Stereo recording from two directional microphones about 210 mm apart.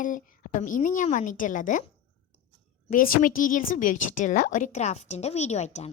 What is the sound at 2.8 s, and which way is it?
A woman's voice, 40° left (ahead or behind).